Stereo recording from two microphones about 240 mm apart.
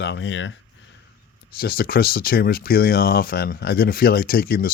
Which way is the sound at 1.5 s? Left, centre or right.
Left.